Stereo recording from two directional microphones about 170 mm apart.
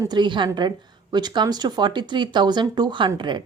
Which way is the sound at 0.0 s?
25° right (ahead or behind).